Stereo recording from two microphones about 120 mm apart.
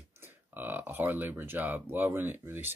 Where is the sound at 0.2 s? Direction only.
15° right (ahead or behind).